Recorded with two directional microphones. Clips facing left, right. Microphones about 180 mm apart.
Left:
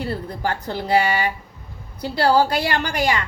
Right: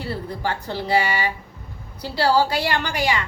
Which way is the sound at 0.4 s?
45° left (ahead or behind).